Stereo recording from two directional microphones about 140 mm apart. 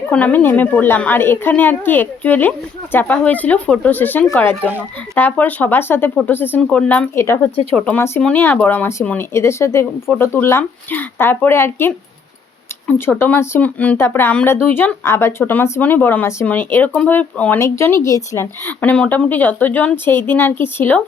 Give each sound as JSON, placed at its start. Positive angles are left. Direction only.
{"t": 0.1, "sound": "speech", "side_deg": 10}